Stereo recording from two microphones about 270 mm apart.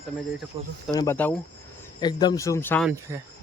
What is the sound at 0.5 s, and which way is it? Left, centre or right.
Speech, right.